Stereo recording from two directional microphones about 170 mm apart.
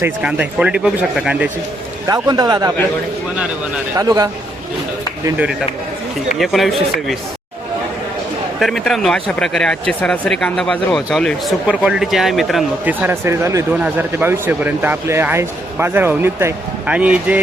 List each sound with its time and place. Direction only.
0.0 s speech: 5° right (ahead or behind)
2.0 s a man's voice: 20° right (ahead or behind)
3.9 s a man's voice: 20° right (ahead or behind)
6.4 s speech: centre (ahead or behind)
8.5 s speech: centre (ahead or behind)
12.9 s speech: 10° right (ahead or behind)